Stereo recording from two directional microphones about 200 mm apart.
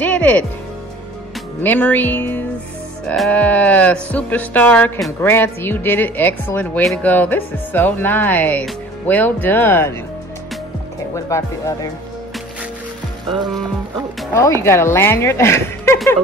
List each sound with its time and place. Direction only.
0.0 s speech: 10° left (ahead or behind)
1.6 s speech: 10° left (ahead or behind)
11.1 s speech: 15° left (ahead or behind)
14.4 s speech: 15° left (ahead or behind)